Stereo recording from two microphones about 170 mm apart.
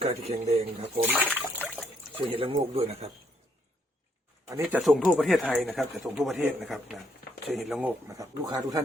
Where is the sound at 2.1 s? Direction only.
30° right (ahead or behind).